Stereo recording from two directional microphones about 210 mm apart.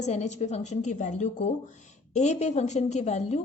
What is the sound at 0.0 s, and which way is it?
A woman's voice, 35° left (ahead or behind).